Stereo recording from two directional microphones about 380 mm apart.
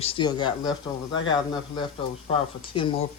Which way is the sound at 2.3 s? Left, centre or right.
Centre.